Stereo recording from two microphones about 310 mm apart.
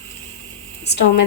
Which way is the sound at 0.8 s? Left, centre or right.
Left.